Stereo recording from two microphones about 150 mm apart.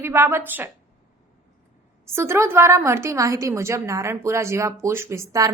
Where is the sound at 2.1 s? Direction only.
15° right (ahead or behind).